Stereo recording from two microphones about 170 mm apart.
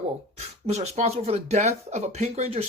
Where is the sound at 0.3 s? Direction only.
40° right (ahead or behind).